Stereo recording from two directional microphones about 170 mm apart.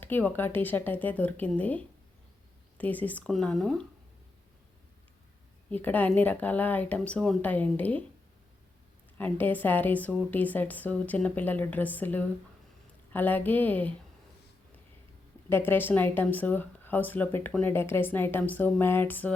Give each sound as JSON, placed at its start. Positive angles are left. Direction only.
{"t": 0.0, "sound": "speech", "side_deg": 10}
{"t": 5.7, "sound": "speech", "side_deg": 10}
{"t": 9.1, "sound": "speech", "side_deg": 10}
{"t": 15.4, "sound": "speech", "side_deg": 15}